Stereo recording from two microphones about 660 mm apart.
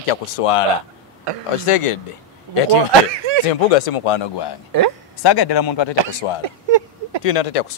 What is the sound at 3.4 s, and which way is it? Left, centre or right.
A man's voice, left.